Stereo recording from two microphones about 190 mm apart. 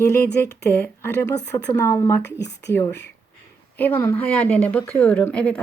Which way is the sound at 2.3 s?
65° left (ahead or behind).